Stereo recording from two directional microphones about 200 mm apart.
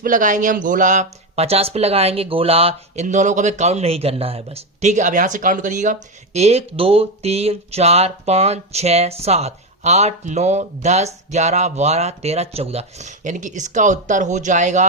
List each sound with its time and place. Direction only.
0.0 s speech: 40° right (ahead or behind)